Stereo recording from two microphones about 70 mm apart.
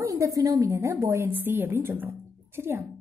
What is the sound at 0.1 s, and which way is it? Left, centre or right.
Speech, right.